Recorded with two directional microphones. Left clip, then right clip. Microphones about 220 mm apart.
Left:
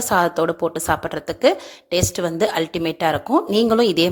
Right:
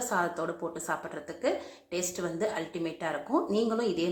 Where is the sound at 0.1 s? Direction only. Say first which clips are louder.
Left 14 dB; 40° left (ahead or behind).